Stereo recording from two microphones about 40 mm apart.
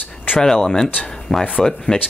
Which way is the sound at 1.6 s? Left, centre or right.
Centre.